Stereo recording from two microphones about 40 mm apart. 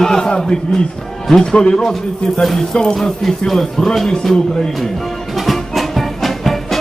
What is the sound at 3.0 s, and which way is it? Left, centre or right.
Speech, centre.